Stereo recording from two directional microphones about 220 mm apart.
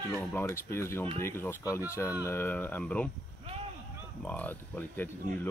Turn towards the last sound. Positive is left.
turn(degrees=5)  # may be behind; listen again after turning